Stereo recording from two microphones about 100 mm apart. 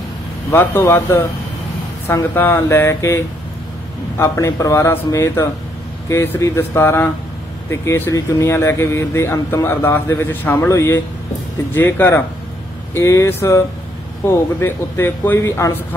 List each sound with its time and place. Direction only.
0.5 s speech: 25° left (ahead or behind)